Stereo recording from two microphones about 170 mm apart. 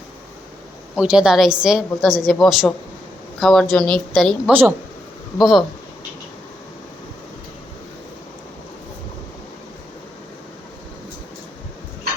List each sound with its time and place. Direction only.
0.9 s a woman's voice: 5° right (ahead or behind)